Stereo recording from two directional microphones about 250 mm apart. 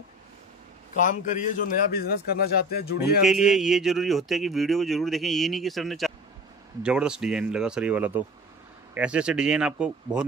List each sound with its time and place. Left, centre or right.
0.9 s a man's voice: left
3.3 s a man's voice: centre